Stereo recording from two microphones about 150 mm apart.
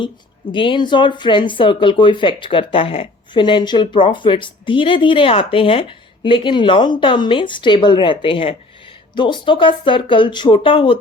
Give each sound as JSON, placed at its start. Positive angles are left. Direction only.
{"t": 0.5, "sound": "speech", "side_deg": 35}